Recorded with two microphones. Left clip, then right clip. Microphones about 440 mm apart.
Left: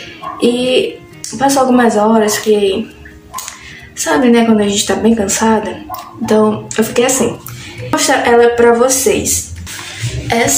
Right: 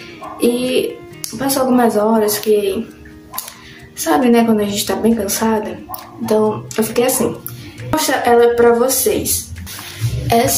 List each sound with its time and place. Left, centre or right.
0.4 s a woman's voice: right
4.0 s a woman's voice: right
10.2 s music: right